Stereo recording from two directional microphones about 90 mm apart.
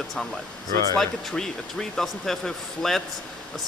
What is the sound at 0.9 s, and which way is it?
Speech, 5° left (ahead or behind).